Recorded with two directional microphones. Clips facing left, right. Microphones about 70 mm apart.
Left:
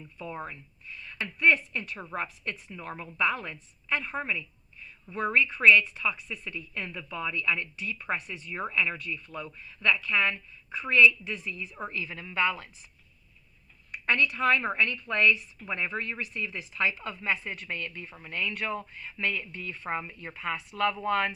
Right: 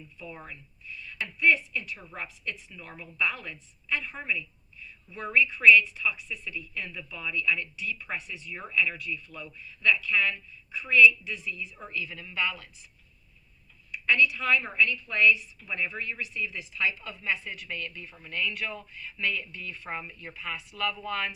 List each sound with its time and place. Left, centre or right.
0.0 s a woman's voice: left
13.9 s a woman's voice: left